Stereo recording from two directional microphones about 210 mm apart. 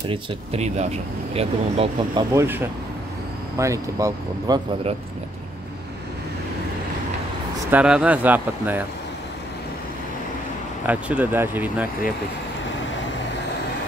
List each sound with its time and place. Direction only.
0.1 s speech: 30° right (ahead or behind)
2.3 s speech: 10° right (ahead or behind)
7.7 s speech: 5° right (ahead or behind)
10.9 s speech: 10° right (ahead or behind)